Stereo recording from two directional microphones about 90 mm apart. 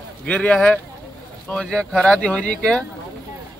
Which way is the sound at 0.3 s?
15° left (ahead or behind).